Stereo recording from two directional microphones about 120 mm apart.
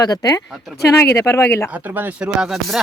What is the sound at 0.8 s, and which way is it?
Speech, 20° left (ahead or behind).